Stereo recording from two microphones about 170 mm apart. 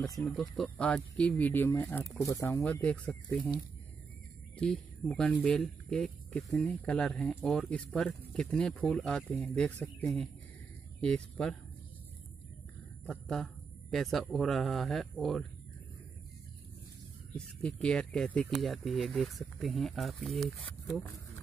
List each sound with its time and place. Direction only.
0.2 s speech: centre (ahead or behind); by 2.6 s 20° left (ahead or behind)
2.6 s speech: 5° left (ahead or behind)
4.6 s speech: 5° left (ahead or behind)
13.0 s a man's voice: centre (ahead or behind)
17.3 s speech: 5° left (ahead or behind)